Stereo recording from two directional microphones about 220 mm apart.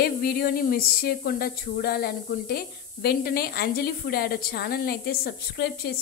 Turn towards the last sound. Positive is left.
turn(degrees=45)  # may be behind; listen again after turning